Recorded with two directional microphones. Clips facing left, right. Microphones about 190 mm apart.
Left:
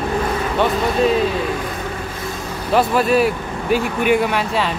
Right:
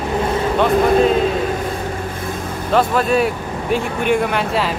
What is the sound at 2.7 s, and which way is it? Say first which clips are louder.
Speech: even; 5° left (ahead or behind).